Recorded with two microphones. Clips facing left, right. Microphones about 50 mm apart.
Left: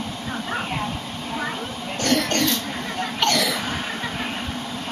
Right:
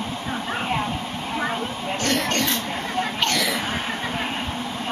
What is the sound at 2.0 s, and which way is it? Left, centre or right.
Rodents, right.